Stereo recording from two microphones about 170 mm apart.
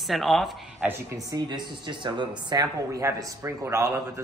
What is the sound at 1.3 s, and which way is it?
Speech, 25° right (ahead or behind).